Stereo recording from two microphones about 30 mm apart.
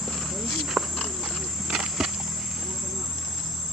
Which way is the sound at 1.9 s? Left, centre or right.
Centre.